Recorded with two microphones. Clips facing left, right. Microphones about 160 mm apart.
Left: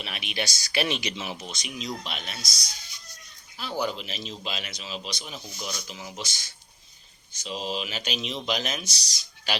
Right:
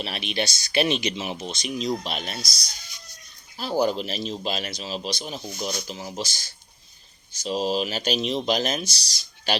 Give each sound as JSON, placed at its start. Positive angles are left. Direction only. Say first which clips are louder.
{"t": 0.0, "sound": "speech", "louder": "right 5 dB", "side_deg": -30}
{"t": 3.6, "sound": "speech", "louder": "right 7 dB", "side_deg": -40}
{"t": 5.5, "sound": "speech", "louder": "right 6 dB", "side_deg": -50}
{"t": 5.9, "sound": "speech", "louder": "right 6 dB", "side_deg": -35}